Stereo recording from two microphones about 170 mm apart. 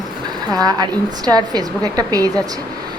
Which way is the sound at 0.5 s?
25° right (ahead or behind).